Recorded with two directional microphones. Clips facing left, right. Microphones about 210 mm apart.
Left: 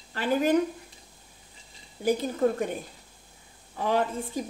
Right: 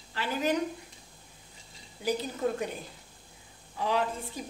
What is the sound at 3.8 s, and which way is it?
Speech, 50° left (ahead or behind).